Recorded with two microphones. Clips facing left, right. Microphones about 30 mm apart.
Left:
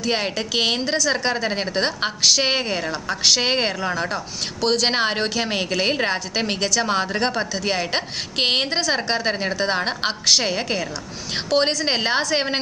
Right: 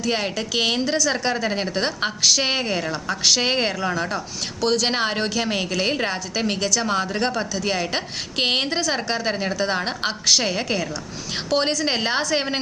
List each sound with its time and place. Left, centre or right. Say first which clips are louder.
0.0 s a woman's voice: left 1 dB; centre
7.6 s a woman's voice: left 1 dB; centre